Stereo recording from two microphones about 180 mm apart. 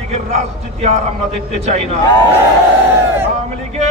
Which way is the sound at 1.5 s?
40° right (ahead or behind).